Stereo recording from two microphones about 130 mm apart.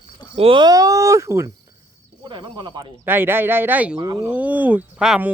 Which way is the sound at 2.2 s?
35° right (ahead or behind).